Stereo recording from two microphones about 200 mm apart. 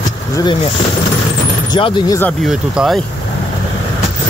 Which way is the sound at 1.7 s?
25° left (ahead or behind).